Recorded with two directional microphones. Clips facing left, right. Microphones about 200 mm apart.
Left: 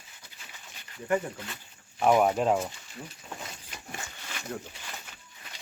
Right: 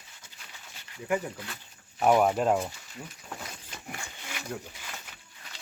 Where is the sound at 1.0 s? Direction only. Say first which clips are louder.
Left 1 dB; 5° right (ahead or behind).